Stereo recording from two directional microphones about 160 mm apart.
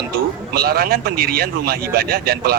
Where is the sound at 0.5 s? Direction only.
70° right (ahead or behind).